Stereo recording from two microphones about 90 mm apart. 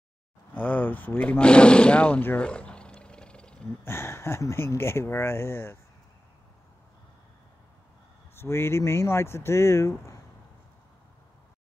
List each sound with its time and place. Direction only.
0.6 s speech: 20° left (ahead or behind)
3.8 s speech: 30° left (ahead or behind)
8.4 s speech: 30° left (ahead or behind)